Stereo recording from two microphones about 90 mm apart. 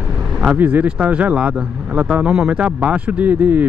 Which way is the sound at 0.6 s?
15° right (ahead or behind).